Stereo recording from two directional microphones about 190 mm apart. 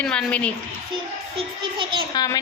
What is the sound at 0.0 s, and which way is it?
Speech, 5° left (ahead or behind).